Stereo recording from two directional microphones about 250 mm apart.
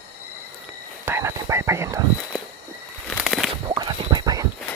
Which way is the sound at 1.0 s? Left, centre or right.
Centre.